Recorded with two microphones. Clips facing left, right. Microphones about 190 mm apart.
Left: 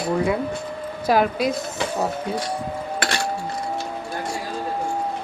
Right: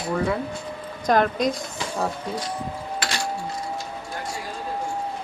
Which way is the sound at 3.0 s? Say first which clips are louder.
Left 4 dB; 60° left (ahead or behind).